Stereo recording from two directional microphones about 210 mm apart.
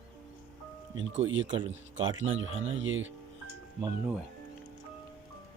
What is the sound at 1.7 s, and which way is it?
Speech, 65° right (ahead or behind).